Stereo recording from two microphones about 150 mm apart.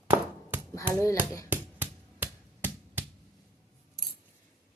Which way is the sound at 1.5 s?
15° right (ahead or behind).